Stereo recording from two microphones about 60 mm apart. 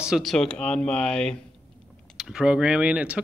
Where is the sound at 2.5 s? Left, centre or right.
Centre.